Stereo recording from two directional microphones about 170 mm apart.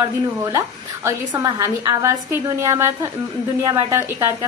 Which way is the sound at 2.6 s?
20° right (ahead or behind).